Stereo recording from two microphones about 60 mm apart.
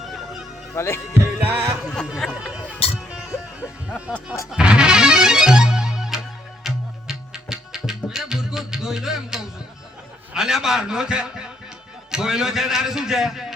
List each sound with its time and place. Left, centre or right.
0.0 s music: centre
0.8 s speech: left
1.1 s music: right
1.8 s speech: centre
2.3 s music: centre
10.3 s a man's voice: centre